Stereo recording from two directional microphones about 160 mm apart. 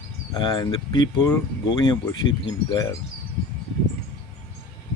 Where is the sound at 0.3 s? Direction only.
30° left (ahead or behind).